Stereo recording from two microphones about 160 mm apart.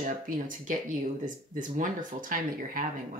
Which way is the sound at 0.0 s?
55° right (ahead or behind).